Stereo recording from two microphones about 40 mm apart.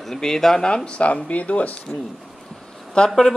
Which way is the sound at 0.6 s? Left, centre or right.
Left.